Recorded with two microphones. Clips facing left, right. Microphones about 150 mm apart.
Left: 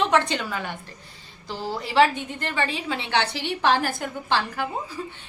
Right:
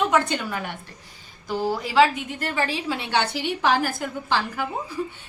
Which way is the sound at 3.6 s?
10° right (ahead or behind).